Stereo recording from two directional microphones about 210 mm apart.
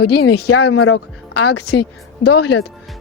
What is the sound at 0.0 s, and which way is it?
Speech, 50° left (ahead or behind).